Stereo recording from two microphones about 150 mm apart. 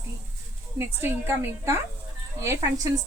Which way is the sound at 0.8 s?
15° right (ahead or behind).